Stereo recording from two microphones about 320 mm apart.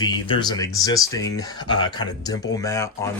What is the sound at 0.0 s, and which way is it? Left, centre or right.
Speech, centre.